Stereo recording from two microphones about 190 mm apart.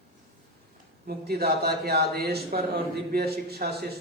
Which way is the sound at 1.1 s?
55° right (ahead or behind).